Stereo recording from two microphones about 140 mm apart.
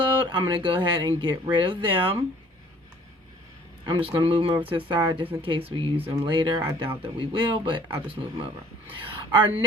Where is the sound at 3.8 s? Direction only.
35° right (ahead or behind).